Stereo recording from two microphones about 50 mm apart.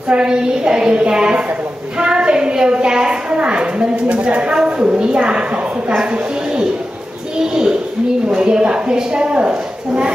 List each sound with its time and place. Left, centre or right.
0.1 s a woman's voice: centre
7.3 s a sound: centre
8.4 s a woman's voice: centre